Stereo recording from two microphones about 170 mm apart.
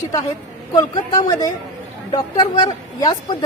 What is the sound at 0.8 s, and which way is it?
A woman's voice, 25° left (ahead or behind).